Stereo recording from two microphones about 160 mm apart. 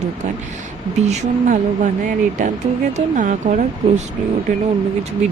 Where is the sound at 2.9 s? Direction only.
50° right (ahead or behind).